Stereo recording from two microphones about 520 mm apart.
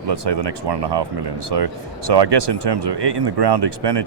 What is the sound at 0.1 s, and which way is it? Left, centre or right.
Speech, right.